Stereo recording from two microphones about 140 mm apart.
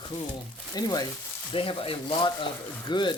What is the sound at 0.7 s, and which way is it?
Speech, 25° left (ahead or behind).